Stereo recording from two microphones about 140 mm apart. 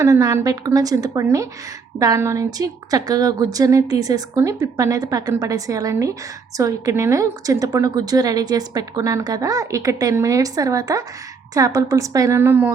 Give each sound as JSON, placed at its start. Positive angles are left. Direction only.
{"t": 0.0, "sound": "a woman's voice", "side_deg": -25}